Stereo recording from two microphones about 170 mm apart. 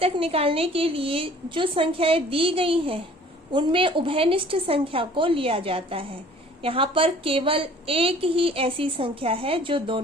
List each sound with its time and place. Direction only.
0.0 s a woman's voice: 35° right (ahead or behind)